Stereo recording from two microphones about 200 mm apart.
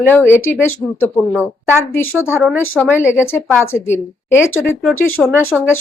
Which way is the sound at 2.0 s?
90° left.